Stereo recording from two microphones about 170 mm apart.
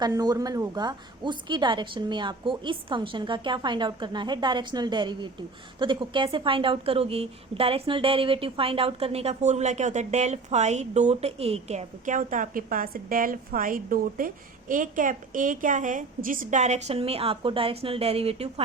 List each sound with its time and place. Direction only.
0.0 s a woman's voice: 20° right (ahead or behind)